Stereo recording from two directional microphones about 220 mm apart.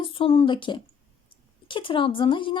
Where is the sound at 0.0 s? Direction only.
25° left (ahead or behind).